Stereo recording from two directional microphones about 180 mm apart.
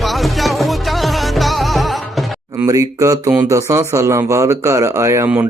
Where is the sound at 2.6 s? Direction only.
20° right (ahead or behind).